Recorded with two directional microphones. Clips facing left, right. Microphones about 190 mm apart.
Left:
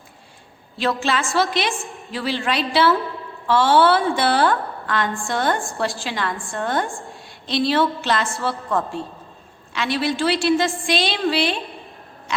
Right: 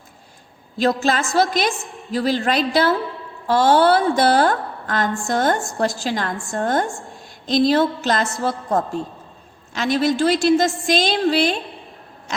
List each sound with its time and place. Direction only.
0.8 s a woman's voice: 40° right (ahead or behind)